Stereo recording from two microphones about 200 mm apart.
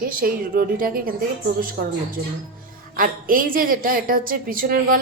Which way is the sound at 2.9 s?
45° right (ahead or behind).